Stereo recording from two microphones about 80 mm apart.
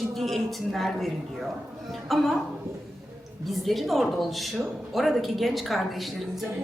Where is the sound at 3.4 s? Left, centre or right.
Centre.